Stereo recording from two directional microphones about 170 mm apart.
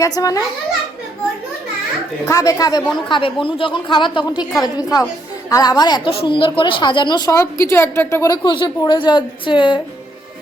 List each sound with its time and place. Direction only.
0.0 s a woman's voice: 20° left (ahead or behind)
2.2 s a woman's voice: 20° left (ahead or behind)